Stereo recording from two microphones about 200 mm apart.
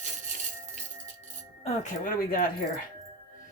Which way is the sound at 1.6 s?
35° left (ahead or behind).